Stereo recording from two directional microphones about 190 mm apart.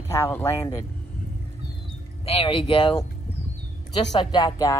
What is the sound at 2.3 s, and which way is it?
Speech, 30° left (ahead or behind).